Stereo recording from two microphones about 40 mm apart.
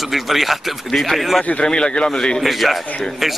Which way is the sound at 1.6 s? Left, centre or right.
Left.